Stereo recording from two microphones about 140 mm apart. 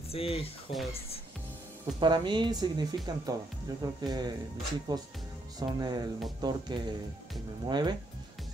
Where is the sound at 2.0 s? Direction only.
30° right (ahead or behind).